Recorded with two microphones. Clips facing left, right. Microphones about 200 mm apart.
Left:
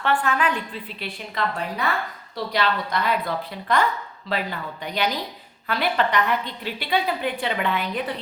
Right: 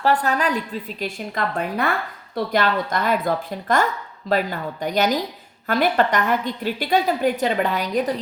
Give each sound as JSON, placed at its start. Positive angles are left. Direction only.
{"t": 0.0, "sound": "a woman's voice", "side_deg": -40}